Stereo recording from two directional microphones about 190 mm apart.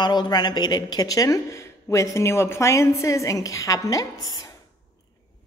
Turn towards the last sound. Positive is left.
turn(degrees=20)  # may be behind; listen again after turning